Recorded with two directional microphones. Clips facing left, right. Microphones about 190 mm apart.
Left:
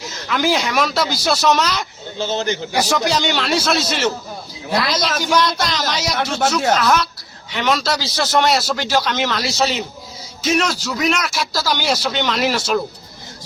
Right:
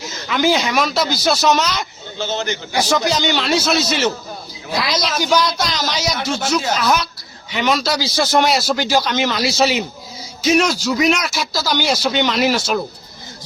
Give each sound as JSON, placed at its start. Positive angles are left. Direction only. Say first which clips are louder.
{"t": 0.3, "sound": "a man's voice", "louder": "right 2 dB", "side_deg": 0}
{"t": 2.1, "sound": "a man's voice", "louder": "left 2 dB", "side_deg": 35}
{"t": 3.0, "sound": "a man's voice", "louder": "even", "side_deg": 0}